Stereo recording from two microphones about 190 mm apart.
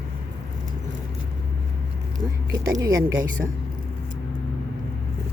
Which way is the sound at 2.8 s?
20° right (ahead or behind).